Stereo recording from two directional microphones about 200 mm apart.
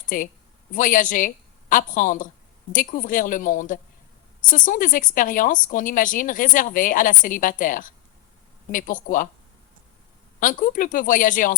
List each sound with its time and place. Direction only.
0.1 s a woman's voice: 40° left (ahead or behind)
10.4 s speech: 45° left (ahead or behind)